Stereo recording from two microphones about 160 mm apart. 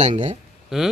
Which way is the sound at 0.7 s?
5° right (ahead or behind).